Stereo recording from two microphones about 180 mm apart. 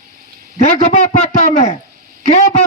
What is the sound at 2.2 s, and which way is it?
Speech, 35° left (ahead or behind).